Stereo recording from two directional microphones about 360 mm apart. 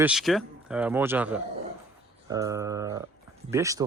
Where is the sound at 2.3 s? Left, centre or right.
Centre.